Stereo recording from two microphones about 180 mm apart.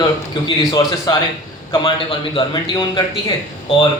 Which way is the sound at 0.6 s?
20° left (ahead or behind).